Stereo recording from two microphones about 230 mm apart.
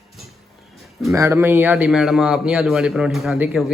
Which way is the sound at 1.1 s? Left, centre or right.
Centre.